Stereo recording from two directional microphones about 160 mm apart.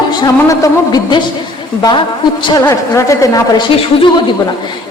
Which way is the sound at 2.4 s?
25° left (ahead or behind).